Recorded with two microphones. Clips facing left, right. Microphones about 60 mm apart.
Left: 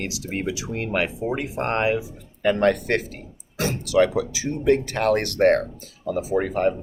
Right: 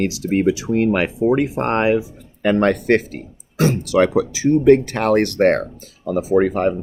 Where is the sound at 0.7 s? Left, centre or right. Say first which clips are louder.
Right 8 dB; right.